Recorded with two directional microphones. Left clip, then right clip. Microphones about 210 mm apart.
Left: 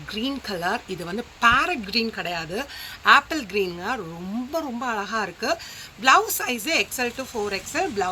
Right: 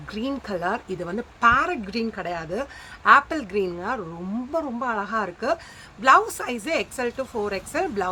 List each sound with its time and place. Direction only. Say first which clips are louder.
0.1 s a woman's voice: even; 20° right (ahead or behind)